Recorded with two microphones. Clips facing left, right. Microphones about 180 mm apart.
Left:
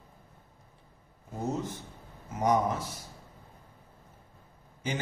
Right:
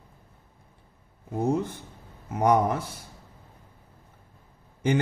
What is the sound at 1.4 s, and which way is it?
Speech, 60° right (ahead or behind).